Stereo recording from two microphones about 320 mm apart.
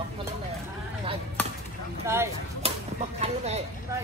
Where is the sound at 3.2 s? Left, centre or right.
Centre.